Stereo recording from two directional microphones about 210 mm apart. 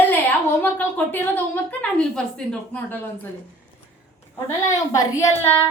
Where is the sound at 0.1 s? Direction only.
10° left (ahead or behind).